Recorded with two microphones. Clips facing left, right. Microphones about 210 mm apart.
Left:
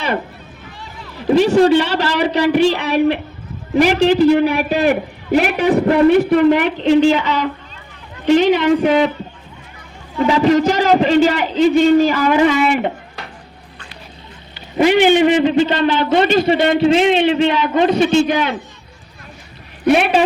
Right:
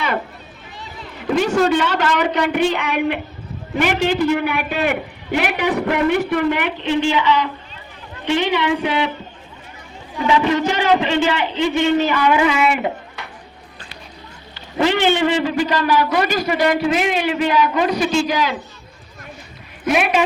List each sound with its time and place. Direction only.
1.3 s a man's voice: 30° left (ahead or behind)
10.2 s a man's voice: 35° left (ahead or behind)
14.5 s a man's voice: 15° left (ahead or behind)
18.3 s a man's voice: 60° left (ahead or behind)
19.8 s a man's voice: 30° left (ahead or behind)